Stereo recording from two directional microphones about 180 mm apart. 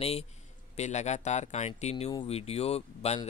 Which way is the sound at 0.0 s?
35° left (ahead or behind).